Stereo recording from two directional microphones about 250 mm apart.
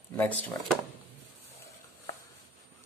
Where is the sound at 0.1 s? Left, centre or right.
Centre.